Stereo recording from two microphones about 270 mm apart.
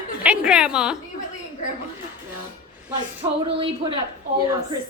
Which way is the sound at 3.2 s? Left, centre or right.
Centre.